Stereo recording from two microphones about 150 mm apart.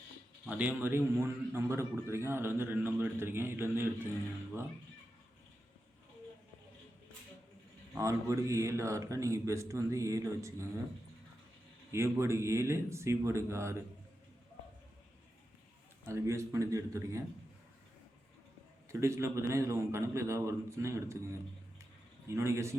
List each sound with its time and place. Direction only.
0.4 s a man's voice: 10° right (ahead or behind)
7.9 s a man's voice: 20° right (ahead or behind)
11.9 s a man's voice: 20° right (ahead or behind)
16.0 s a man's voice: 20° right (ahead or behind)
18.9 s a man's voice: 20° right (ahead or behind)
22.3 s a man's voice: 20° right (ahead or behind)